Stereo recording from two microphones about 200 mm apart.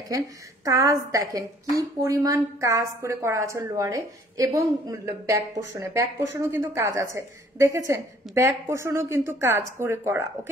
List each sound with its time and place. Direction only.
0.7 s a woman's voice: 15° right (ahead or behind)